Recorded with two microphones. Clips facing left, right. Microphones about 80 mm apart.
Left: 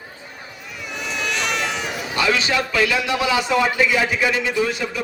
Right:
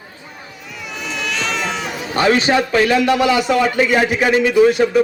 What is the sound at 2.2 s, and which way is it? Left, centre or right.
A man's voice, right.